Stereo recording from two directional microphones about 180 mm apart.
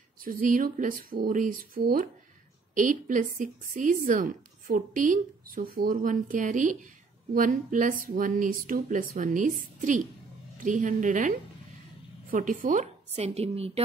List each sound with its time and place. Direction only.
0.2 s a woman's voice: 50° right (ahead or behind)